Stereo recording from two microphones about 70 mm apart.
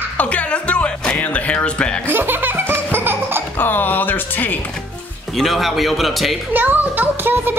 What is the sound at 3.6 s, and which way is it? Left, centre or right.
Speech, left.